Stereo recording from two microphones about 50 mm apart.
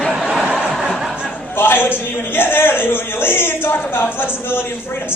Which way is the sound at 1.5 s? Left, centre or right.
Left.